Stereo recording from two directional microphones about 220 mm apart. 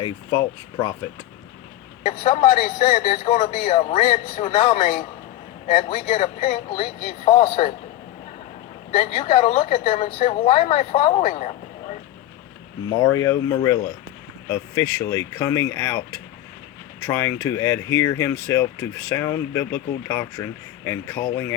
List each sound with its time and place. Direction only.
0.0 s a woman's voice: 20° left (ahead or behind)
2.2 s a man's voice: 30° left (ahead or behind)
7.3 s a woman's voice: 25° left (ahead or behind)
8.9 s a woman's voice: 30° left (ahead or behind)
13.0 s speech: 15° left (ahead or behind)